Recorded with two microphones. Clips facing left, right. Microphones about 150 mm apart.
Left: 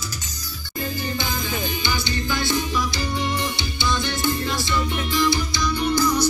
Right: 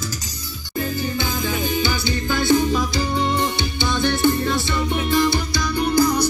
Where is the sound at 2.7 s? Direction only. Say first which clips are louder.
Right 4 dB; 50° right (ahead or behind).